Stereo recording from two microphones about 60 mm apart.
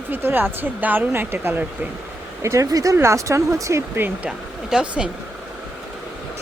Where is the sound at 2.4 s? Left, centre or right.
Right.